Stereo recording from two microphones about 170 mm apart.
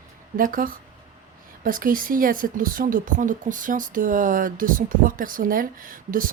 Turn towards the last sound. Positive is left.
turn(degrees=-55)  # may be behind; listen again after turning